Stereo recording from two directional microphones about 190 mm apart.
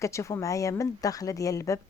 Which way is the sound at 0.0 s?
15° left (ahead or behind).